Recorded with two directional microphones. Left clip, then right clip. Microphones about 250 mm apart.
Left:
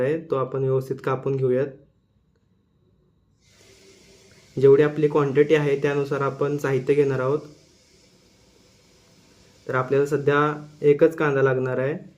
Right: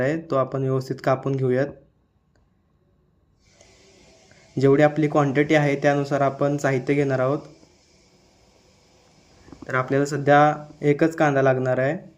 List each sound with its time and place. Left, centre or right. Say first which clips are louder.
0.0 s speech: right 1 dB; right
4.6 s speech: left 2 dB; right
9.6 s speech: left 1 dB; right